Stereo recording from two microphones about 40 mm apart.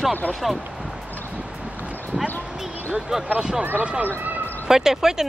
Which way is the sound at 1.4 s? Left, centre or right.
Right.